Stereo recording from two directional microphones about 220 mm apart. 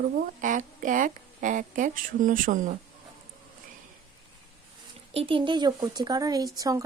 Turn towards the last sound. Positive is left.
turn(degrees=-15)  # may be behind; listen again after turning